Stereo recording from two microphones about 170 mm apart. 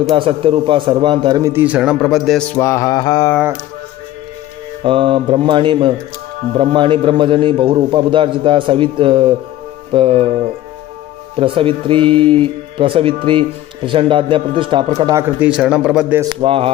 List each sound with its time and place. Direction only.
0.2 s a man's voice: 30° right (ahead or behind); by 3.3 s 20° left (ahead or behind)
4.8 s a man's voice: 30° right (ahead or behind)
15.4 s a man's voice: 5° right (ahead or behind)
16.4 s a man's voice: 35° right (ahead or behind)